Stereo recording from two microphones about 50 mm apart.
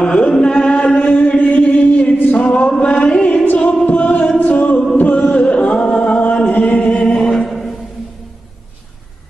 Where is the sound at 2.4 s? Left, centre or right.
Left.